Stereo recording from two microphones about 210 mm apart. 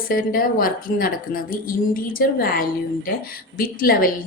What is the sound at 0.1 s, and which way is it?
A woman's voice, 45° left (ahead or behind).